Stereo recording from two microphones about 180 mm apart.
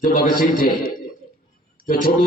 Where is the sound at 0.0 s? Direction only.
55° left (ahead or behind).